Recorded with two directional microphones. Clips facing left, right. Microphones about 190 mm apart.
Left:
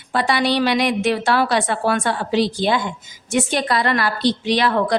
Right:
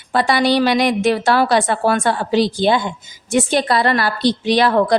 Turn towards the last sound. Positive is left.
turn(degrees=-40)  # may be behind; listen again after turning